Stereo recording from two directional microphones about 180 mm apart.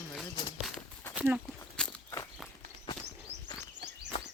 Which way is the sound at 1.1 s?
5° right (ahead or behind).